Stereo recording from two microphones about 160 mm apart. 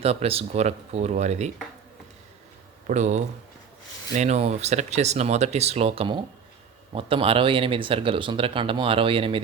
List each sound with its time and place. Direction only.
0.0 s speech: 40° right (ahead or behind)
2.8 s speech: 45° right (ahead or behind)